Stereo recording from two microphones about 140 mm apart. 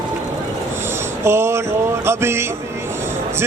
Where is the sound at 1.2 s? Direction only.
20° right (ahead or behind).